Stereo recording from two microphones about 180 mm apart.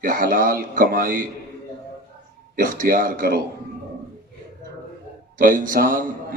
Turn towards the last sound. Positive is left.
turn(degrees=-50)  # may be behind; listen again after turning